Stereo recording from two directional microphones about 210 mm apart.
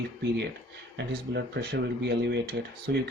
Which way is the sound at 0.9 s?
55° right (ahead or behind).